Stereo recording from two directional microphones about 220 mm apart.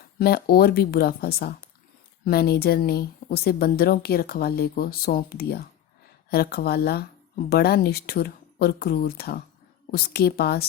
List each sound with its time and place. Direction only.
0.2 s speech: 45° left (ahead or behind)